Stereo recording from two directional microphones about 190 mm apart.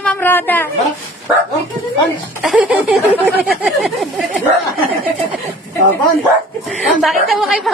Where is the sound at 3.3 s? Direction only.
55° right (ahead or behind).